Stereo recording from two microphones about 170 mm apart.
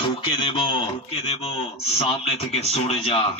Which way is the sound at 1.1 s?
35° left (ahead or behind).